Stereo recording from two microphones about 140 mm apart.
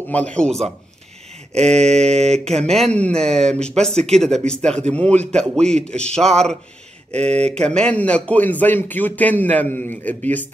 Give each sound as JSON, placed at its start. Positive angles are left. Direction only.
{"t": 0.1, "sound": "speech", "side_deg": 10}
{"t": 7.2, "sound": "speech", "side_deg": -50}
{"t": 7.4, "sound": "speech", "side_deg": 5}